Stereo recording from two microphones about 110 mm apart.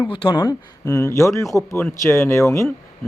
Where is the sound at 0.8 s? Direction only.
25° left (ahead or behind).